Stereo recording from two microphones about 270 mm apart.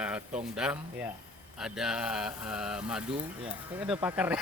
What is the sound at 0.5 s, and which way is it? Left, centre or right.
Speech, centre.